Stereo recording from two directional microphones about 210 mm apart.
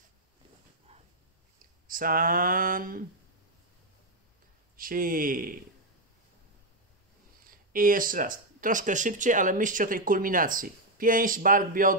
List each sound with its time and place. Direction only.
1.9 s speech: 40° right (ahead or behind)
4.7 s speech: 40° right (ahead or behind)
7.4 s speech: 40° right (ahead or behind)